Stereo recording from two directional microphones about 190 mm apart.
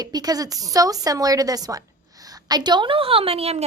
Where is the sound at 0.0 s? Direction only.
20° right (ahead or behind).